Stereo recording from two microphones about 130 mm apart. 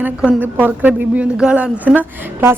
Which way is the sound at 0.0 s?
10° right (ahead or behind).